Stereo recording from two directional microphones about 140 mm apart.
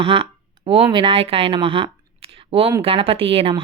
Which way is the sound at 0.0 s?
40° right (ahead or behind).